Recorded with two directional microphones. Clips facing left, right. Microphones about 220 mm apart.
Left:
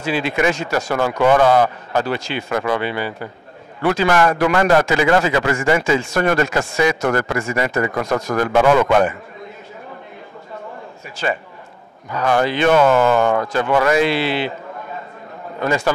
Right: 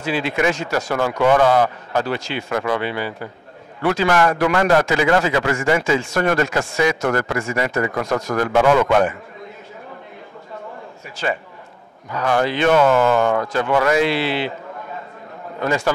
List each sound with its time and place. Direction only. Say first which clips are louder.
0.0 s a man's voice: left 1 dB; 10° left (ahead or behind)
12.1 s a man's voice: left 1 dB; 20° left (ahead or behind)
15.6 s a man's voice: left 1 dB; 15° left (ahead or behind)